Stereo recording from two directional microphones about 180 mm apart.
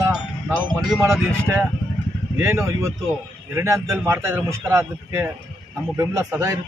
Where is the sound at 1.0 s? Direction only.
15° right (ahead or behind).